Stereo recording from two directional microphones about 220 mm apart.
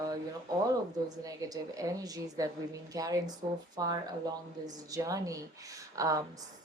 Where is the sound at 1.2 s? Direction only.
15° right (ahead or behind).